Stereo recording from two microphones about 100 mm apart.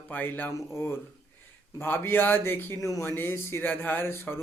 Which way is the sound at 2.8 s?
35° left (ahead or behind).